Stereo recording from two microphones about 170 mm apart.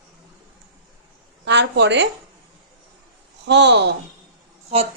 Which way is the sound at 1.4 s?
90° right.